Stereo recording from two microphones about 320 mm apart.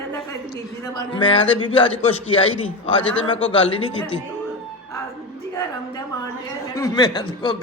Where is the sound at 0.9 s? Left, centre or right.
Centre.